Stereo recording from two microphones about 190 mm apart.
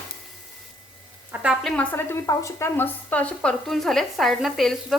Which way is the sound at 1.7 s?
10° left (ahead or behind).